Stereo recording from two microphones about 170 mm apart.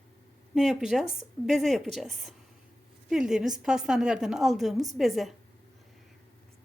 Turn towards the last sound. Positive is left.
turn(degrees=0)  # may be behind; listen again after turning